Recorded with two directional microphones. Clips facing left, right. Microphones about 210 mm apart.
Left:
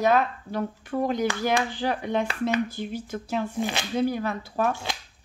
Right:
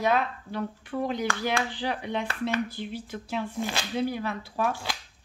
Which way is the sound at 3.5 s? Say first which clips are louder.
Left 3 dB; 20° left (ahead or behind).